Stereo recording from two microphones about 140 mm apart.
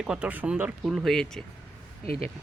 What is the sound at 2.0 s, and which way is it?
Speech, 45° right (ahead or behind).